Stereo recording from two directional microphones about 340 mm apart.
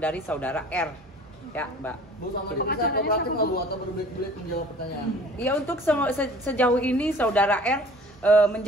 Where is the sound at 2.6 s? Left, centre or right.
Left.